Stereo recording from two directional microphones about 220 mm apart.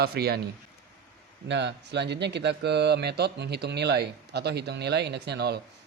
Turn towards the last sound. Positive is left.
turn(degrees=-50)  # may be behind; listen again after turning